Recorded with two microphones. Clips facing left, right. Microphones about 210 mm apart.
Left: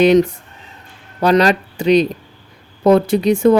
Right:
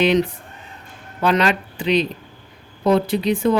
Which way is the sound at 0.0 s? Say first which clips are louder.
Left 6 dB; 45° left (ahead or behind).